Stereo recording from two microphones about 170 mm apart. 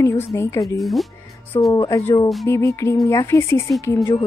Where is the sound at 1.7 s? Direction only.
20° left (ahead or behind).